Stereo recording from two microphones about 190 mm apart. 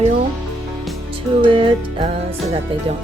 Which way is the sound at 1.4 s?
25° right (ahead or behind).